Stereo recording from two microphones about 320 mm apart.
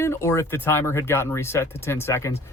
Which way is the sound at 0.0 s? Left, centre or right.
Centre.